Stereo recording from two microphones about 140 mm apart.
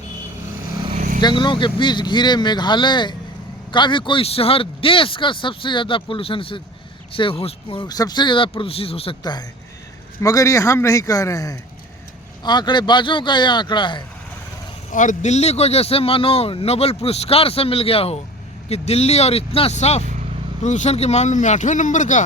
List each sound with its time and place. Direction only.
0.9 s vehicle: 65° right (ahead or behind)
1.2 s speech: 35° left (ahead or behind)
10.2 s a man's voice: 25° left (ahead or behind)
14.9 s speech: 60° left (ahead or behind)